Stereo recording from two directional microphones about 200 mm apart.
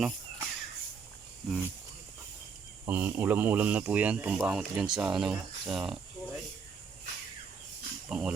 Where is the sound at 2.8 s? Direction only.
10° right (ahead or behind).